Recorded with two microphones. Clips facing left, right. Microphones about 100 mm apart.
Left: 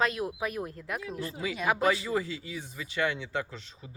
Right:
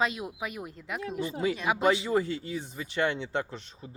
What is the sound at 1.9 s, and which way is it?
Speech, 25° right (ahead or behind).